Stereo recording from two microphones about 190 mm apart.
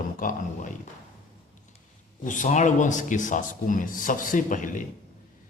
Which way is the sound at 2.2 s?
40° left (ahead or behind).